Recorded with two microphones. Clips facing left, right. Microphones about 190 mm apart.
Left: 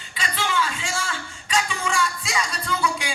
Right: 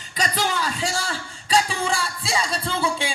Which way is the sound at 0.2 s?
40° right (ahead or behind).